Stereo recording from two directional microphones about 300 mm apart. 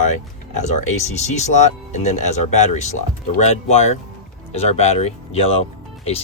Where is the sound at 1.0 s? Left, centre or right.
Left.